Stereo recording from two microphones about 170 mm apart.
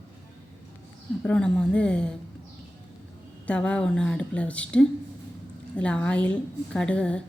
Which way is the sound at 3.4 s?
5° left (ahead or behind).